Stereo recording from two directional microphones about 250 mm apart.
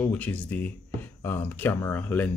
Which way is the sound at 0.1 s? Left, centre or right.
Centre.